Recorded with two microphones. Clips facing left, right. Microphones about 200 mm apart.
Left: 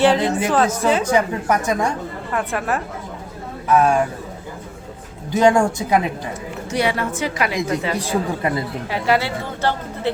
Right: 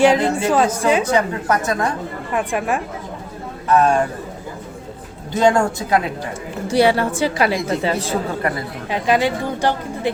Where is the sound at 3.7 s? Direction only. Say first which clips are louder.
Right 1 dB; 10° left (ahead or behind).